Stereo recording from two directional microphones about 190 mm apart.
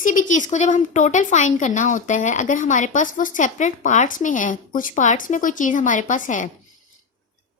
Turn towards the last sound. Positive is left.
turn(degrees=40)  # may be behind; listen again after turning